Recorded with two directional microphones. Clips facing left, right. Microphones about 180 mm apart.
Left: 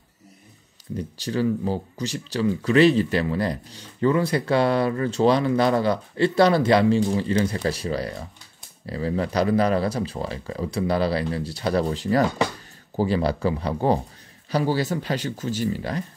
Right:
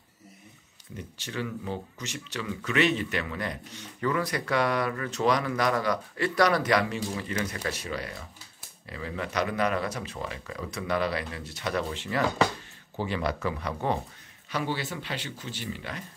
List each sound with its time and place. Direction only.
0.9 s speech: 35° left (ahead or behind)